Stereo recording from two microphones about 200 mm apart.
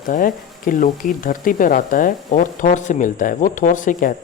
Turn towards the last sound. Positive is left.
turn(degrees=40)  # may be behind; listen again after turning